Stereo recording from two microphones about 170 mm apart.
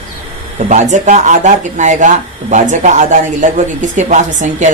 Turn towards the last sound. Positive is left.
turn(degrees=-45)  # may be behind; listen again after turning